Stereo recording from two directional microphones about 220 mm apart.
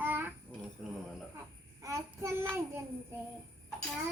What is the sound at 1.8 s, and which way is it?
Child singing, 15° right (ahead or behind).